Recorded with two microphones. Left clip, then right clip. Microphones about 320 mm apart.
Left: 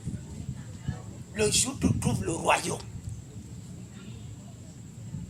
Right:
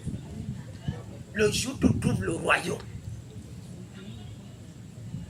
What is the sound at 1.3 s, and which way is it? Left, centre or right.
A man's voice, left.